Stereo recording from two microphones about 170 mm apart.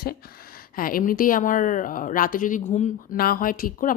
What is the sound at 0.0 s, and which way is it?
Speech, 60° left (ahead or behind).